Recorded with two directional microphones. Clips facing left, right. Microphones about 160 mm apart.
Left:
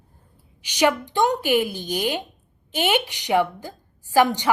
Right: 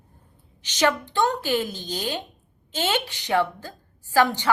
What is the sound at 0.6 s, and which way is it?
A woman's voice, 10° left (ahead or behind).